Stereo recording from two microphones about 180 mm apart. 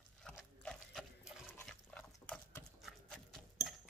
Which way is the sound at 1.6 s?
5° left (ahead or behind).